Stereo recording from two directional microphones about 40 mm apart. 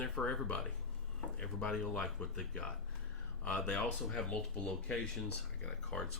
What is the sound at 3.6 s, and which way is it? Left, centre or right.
Speech, left.